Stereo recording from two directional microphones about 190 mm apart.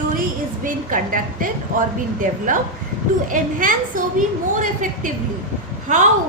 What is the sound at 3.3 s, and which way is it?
A woman's voice, 45° right (ahead or behind).